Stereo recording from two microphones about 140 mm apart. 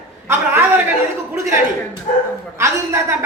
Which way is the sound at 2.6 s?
20° right (ahead or behind).